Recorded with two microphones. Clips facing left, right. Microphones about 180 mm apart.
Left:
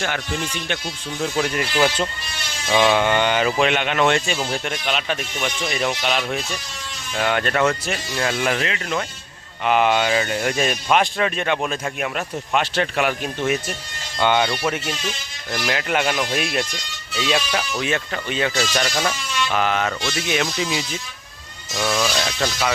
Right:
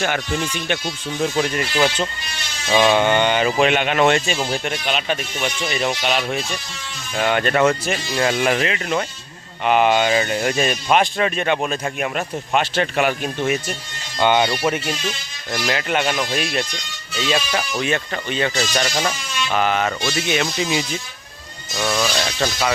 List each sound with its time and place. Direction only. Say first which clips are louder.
1.2 s speech: right 2 dB; centre (ahead or behind)
3.8 s speech: right 2 dB; 40° right (ahead or behind)
4.1 s speech: right 2 dB; 5° right (ahead or behind)
15.5 s speech: right 1 dB; centre (ahead or behind)